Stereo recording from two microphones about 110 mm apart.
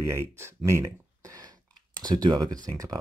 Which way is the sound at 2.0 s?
40° right (ahead or behind).